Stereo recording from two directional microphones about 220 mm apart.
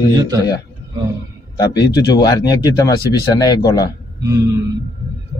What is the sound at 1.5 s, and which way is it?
Speech, 20° left (ahead or behind).